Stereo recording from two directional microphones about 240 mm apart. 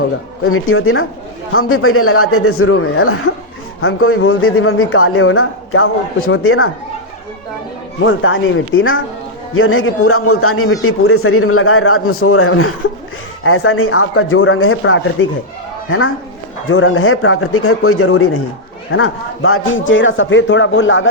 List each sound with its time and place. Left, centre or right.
0.5 s a man's voice: left
8.0 s a man's voice: left